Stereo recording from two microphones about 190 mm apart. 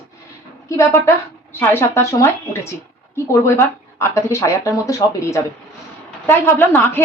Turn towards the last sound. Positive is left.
turn(degrees=10)  # may be behind; listen again after turning